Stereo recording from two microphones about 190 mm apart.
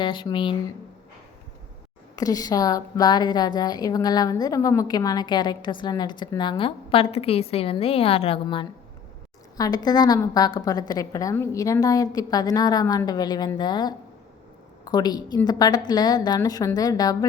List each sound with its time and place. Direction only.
0.0 s a woman's voice: 25° left (ahead or behind)
2.1 s a woman's voice: 20° left (ahead or behind)